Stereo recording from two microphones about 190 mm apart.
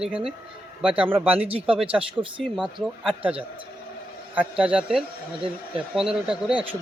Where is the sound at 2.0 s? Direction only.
5° right (ahead or behind).